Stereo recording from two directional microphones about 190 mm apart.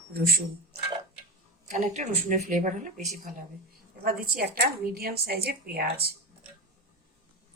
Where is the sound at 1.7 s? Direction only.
40° right (ahead or behind); by 6.1 s 55° right (ahead or behind).